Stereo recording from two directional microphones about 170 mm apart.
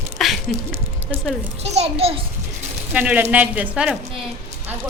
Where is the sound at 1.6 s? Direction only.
40° right (ahead or behind).